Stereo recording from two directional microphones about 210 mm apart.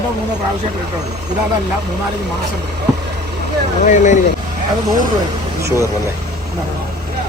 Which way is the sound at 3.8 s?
35° left (ahead or behind).